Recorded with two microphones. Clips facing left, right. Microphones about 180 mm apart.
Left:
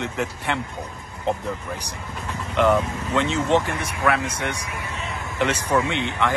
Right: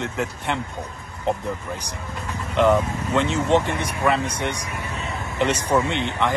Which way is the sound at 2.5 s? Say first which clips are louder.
Right 1 dB; 15° right (ahead or behind).